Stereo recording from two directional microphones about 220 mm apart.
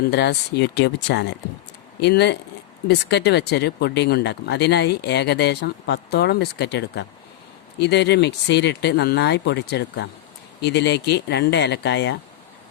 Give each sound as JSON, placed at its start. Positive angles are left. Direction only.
{"t": 0.1, "sound": "speech", "side_deg": 50}